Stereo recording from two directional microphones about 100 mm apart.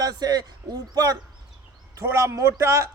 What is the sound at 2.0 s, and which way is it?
Speech, 30° right (ahead or behind).